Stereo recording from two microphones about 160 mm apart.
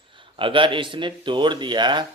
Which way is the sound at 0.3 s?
30° right (ahead or behind).